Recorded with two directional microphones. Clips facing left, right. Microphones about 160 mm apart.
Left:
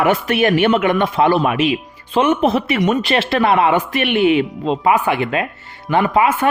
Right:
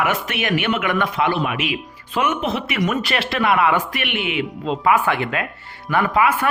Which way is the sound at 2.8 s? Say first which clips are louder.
Left 5 dB; 25° left (ahead or behind).